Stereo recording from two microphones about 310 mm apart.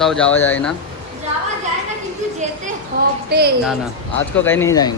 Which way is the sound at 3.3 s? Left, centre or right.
Right.